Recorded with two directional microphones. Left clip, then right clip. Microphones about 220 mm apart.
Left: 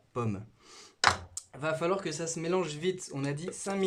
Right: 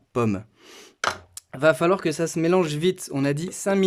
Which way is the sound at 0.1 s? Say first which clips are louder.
Right 11 dB; 50° right (ahead or behind).